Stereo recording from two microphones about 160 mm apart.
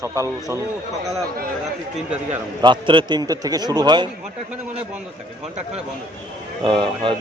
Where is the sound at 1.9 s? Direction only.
10° right (ahead or behind).